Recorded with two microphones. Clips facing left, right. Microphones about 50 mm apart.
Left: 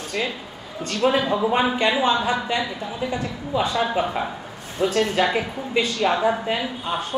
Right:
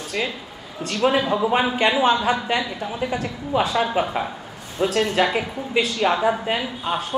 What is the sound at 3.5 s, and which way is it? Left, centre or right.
Speech, right.